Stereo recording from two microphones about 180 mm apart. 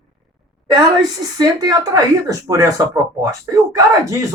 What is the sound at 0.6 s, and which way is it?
A woman's voice, 20° right (ahead or behind).